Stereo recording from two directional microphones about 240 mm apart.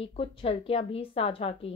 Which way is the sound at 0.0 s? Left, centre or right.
Left.